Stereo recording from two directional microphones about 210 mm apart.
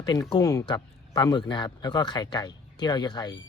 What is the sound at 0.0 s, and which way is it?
Speech, 20° left (ahead or behind).